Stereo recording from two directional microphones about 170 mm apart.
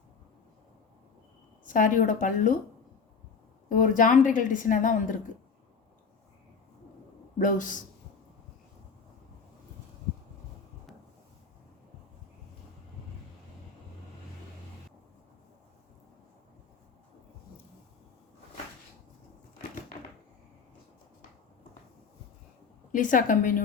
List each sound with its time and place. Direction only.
1.6 s a woman's voice: 50° left (ahead or behind)
3.7 s a woman's voice: 50° left (ahead or behind)
7.3 s a woman's voice: 50° left (ahead or behind)
22.9 s a woman's voice: 50° left (ahead or behind)